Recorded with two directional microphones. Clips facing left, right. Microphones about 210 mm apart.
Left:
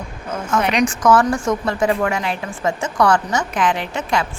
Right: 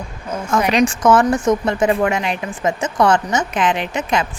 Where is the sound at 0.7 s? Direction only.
25° right (ahead or behind).